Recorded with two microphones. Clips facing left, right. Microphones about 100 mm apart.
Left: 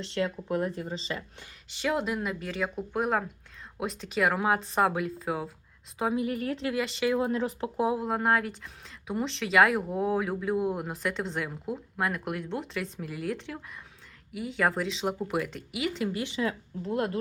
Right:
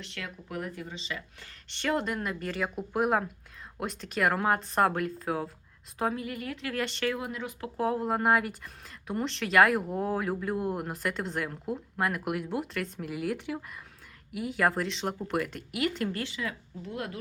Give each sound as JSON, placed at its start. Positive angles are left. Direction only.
{"t": 0.0, "sound": "speech", "side_deg": 30}
{"t": 1.7, "sound": "speech", "side_deg": 5}
{"t": 6.1, "sound": "a woman's voice", "side_deg": 30}
{"t": 6.7, "sound": "speech", "side_deg": 0}
{"t": 7.1, "sound": "speech", "side_deg": 30}
{"t": 7.8, "sound": "speech", "side_deg": 10}
{"t": 8.0, "sound": "speech", "side_deg": 0}
{"t": 16.2, "sound": "speech", "side_deg": 25}